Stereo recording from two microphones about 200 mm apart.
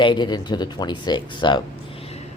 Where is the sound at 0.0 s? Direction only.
25° left (ahead or behind).